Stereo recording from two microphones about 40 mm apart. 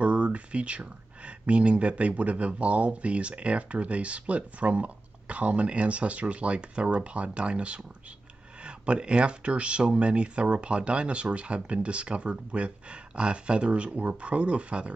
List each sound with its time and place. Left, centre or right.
0.0 s speech: right